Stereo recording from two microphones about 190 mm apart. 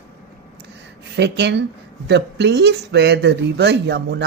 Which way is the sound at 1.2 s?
65° right (ahead or behind).